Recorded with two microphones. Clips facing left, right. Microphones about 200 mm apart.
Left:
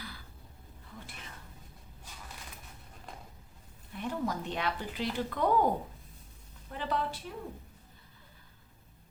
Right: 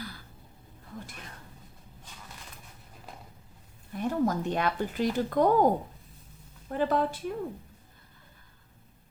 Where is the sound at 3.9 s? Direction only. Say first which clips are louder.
Right 7 dB; 45° right (ahead or behind).